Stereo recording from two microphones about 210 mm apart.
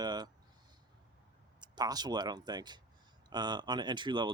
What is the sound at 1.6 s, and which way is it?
Speech, 20° right (ahead or behind).